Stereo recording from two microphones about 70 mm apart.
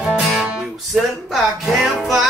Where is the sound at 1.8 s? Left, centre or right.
Centre.